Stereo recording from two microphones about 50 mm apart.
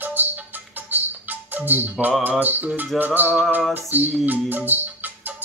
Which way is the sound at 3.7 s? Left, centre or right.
Right.